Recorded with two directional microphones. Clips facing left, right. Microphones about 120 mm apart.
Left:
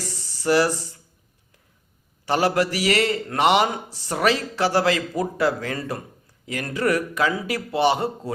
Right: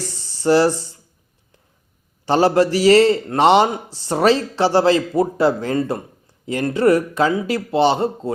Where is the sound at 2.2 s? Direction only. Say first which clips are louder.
Right 6 dB; 30° right (ahead or behind).